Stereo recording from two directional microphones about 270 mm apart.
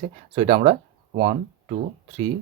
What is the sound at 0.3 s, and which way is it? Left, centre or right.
Speech, right.